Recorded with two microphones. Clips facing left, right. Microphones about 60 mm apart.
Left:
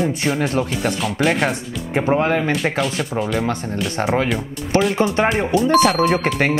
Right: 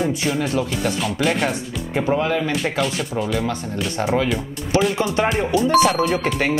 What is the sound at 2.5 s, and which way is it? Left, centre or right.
Speech, centre.